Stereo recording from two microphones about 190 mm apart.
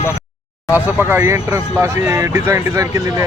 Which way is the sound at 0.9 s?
10° right (ahead or behind).